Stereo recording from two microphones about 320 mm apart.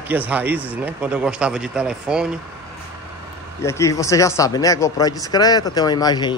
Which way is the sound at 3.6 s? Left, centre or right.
Centre.